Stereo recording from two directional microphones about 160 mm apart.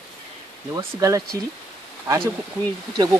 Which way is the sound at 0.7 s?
20° right (ahead or behind).